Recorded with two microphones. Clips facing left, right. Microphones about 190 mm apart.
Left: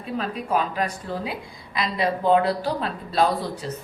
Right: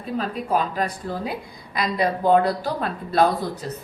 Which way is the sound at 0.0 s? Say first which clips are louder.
Right 2 dB; 40° right (ahead or behind).